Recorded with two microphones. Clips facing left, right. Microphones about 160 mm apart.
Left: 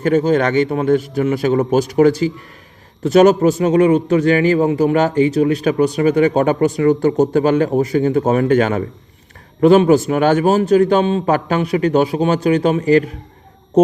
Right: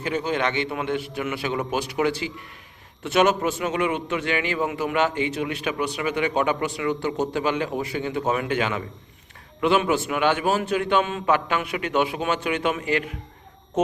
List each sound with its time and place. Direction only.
0.0 s a man's voice: 45° left (ahead or behind)